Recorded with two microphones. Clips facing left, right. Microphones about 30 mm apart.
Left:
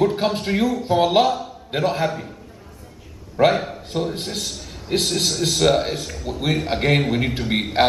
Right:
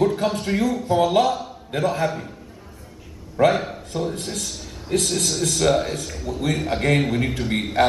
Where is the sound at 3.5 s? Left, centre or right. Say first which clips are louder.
Left 1 dB; centre.